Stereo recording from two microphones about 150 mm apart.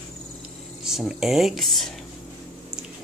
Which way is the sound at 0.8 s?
Centre (ahead or behind).